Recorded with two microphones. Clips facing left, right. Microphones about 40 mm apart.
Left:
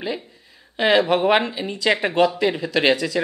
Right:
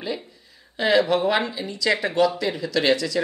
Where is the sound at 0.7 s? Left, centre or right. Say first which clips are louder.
Left 2 dB; left.